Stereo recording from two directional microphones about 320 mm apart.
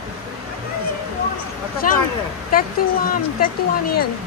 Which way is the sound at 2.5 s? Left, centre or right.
Left.